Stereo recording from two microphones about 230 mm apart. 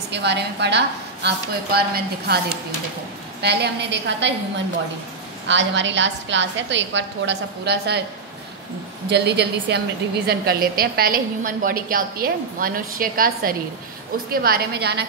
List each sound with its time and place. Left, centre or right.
0.1 s a woman's voice: right
3.4 s a woman's voice: right
5.5 s a woman's voice: right
9.1 s a woman's voice: right